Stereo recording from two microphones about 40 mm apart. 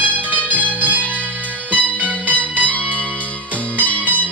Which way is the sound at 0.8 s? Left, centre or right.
Right.